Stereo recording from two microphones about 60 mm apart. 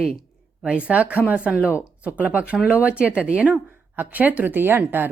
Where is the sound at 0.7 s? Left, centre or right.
Right.